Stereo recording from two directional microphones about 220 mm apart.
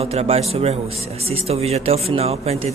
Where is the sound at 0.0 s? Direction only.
30° right (ahead or behind).